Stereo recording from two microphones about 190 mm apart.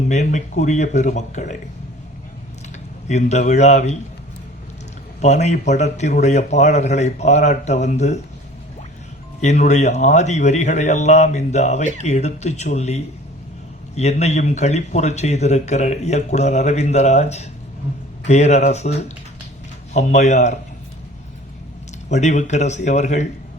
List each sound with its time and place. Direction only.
0.1 s speech: 40° left (ahead or behind)
3.1 s speech: 35° left (ahead or behind)
5.2 s speech: 35° left (ahead or behind)
9.4 s speech: 40° left (ahead or behind)
22.1 s speech: 40° left (ahead or behind)